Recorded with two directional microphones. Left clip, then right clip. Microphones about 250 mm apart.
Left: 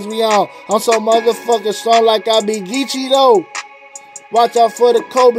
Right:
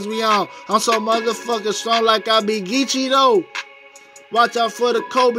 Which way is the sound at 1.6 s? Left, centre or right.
Centre.